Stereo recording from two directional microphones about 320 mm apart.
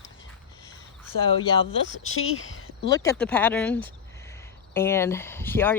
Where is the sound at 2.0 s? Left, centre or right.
Left.